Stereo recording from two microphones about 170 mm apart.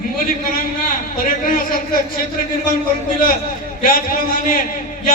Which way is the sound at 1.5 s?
55° left (ahead or behind).